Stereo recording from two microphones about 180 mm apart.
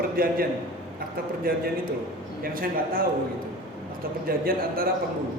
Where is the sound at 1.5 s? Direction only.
55° right (ahead or behind).